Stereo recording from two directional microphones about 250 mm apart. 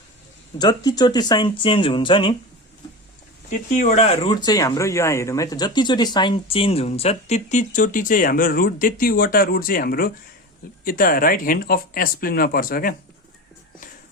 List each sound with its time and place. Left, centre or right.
0.6 s speech: centre
3.8 s speech: left